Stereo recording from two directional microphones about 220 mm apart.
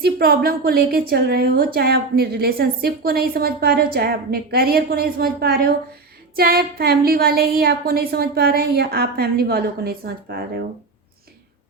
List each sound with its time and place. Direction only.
0.0 s a woman's voice: 45° right (ahead or behind)